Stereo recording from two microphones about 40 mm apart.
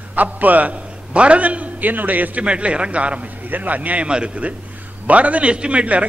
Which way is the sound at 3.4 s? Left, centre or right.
Right.